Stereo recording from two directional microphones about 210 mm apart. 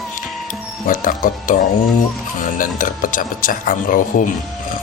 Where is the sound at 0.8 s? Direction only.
40° left (ahead or behind).